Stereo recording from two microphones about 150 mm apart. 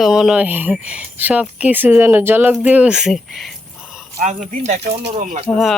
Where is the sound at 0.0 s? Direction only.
Centre (ahead or behind).